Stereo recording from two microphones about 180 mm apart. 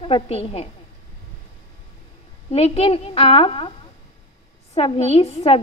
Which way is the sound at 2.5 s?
30° left (ahead or behind).